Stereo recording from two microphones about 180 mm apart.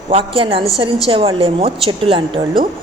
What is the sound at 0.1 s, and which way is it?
A woman's voice, 30° right (ahead or behind).